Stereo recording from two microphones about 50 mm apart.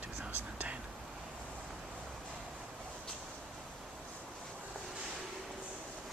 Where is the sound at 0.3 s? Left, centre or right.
Right.